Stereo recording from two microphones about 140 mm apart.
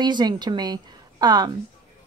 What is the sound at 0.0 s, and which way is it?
A woman's voice, 30° right (ahead or behind).